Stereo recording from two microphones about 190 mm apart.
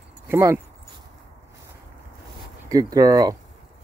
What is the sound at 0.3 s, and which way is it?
Speech, 15° right (ahead or behind).